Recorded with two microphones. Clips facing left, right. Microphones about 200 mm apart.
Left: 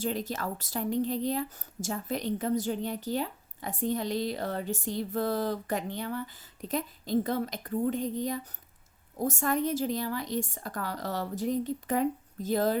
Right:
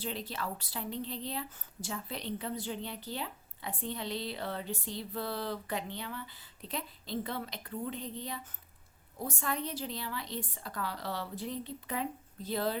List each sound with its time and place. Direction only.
0.0 s a woman's voice: 45° left (ahead or behind)